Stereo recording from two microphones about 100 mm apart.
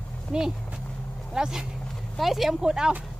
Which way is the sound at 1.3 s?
5° right (ahead or behind).